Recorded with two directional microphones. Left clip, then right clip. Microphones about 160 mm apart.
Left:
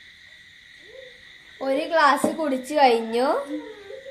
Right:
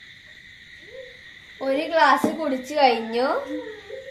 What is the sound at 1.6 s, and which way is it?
A woman's voice, 20° left (ahead or behind).